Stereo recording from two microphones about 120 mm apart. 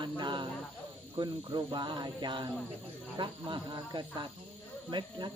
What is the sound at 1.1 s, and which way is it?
Speech, 40° right (ahead or behind).